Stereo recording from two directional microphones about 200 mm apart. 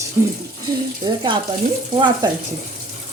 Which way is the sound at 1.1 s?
25° right (ahead or behind).